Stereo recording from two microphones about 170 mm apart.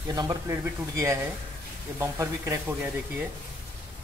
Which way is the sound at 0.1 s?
20° right (ahead or behind).